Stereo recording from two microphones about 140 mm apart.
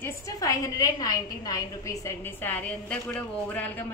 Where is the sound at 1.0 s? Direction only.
25° left (ahead or behind).